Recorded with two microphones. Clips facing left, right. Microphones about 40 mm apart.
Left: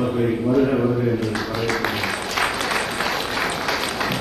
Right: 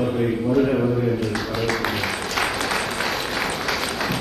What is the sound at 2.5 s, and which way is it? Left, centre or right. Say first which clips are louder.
Applause: left 1 dB; centre.